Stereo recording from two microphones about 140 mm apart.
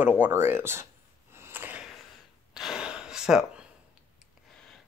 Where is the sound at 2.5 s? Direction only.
5° right (ahead or behind).